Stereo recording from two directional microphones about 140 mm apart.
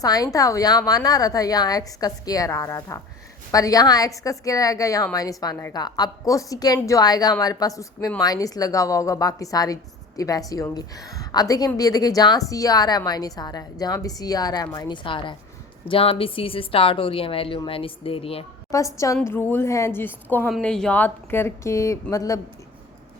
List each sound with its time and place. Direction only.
0.0 s a woman's voice: 25° left (ahead or behind); by 18.4 s 45° left (ahead or behind)
18.9 s a woman's voice: 20° left (ahead or behind)